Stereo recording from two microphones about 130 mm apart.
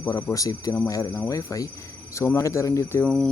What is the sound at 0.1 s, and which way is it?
Speech, 20° left (ahead or behind).